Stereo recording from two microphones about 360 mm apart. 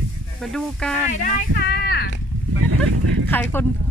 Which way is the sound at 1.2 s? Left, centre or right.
Left.